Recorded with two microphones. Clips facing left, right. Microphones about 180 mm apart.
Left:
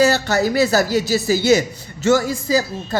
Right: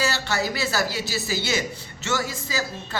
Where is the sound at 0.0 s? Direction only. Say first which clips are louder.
Left 10 dB; 45° left (ahead or behind).